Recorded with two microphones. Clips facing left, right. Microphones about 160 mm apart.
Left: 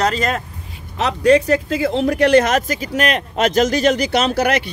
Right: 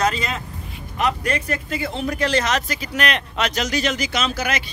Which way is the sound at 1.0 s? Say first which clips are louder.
Left 9 dB; 85° left.